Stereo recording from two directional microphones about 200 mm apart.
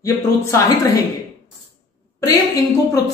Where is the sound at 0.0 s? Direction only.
15° left (ahead or behind).